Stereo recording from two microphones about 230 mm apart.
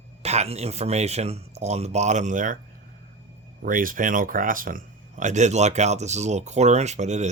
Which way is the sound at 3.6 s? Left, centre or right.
Right.